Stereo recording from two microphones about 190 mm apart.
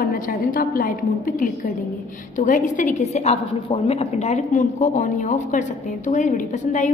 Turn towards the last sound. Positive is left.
turn(degrees=40)  # may be behind; listen again after turning